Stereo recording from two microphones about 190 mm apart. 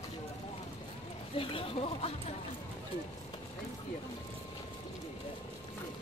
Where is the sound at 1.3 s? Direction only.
30° left (ahead or behind).